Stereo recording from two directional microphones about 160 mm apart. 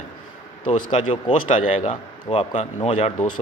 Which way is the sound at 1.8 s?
40° left (ahead or behind).